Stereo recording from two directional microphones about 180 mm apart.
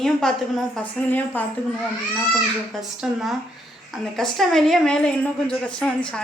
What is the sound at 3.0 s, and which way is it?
A woman's voice, centre (ahead or behind).